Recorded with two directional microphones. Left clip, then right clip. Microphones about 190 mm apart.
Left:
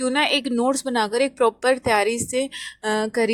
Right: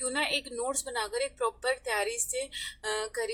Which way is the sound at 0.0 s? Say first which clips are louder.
Left 10 dB; 40° left (ahead or behind).